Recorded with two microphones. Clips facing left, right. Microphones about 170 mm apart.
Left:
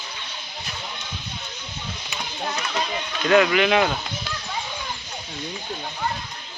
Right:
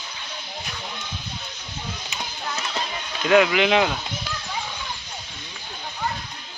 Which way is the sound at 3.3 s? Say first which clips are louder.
Even; 15° right (ahead or behind).